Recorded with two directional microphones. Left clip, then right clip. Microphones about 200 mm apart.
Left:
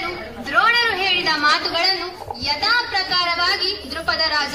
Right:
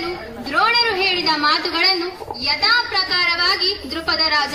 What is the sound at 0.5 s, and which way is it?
A woman's voice, 40° right (ahead or behind).